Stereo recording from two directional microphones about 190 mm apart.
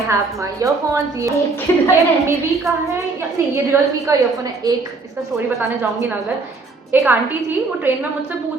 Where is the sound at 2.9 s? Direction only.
15° right (ahead or behind).